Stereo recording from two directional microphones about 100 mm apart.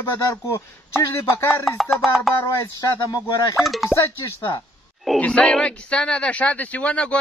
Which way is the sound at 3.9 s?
30° left (ahead or behind).